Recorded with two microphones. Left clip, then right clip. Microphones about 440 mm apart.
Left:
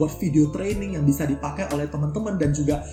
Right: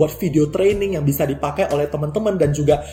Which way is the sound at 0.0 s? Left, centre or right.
Right.